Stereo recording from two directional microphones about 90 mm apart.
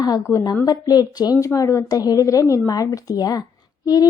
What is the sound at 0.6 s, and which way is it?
Speech, 50° left (ahead or behind).